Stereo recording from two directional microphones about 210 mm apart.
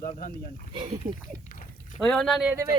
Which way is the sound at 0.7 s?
25° right (ahead or behind).